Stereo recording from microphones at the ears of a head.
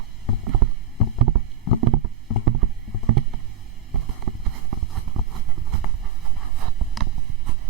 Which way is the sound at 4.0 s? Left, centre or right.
Right.